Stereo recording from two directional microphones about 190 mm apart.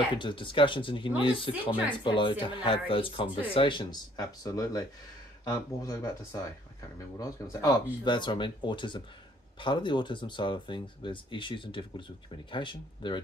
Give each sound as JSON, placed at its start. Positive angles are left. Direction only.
{"t": 0.2, "sound": "speech", "side_deg": 25}